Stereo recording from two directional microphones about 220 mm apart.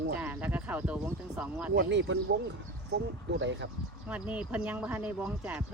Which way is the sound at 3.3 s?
50° right (ahead or behind).